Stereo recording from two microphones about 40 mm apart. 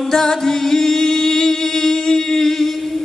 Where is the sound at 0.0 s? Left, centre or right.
Centre.